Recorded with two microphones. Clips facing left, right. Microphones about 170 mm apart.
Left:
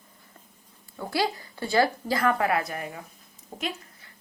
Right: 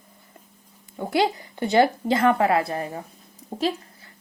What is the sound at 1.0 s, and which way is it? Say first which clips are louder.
A woman's voice: right 5 dB; 20° right (ahead or behind).